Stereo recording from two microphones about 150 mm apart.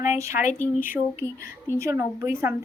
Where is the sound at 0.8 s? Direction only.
15° right (ahead or behind).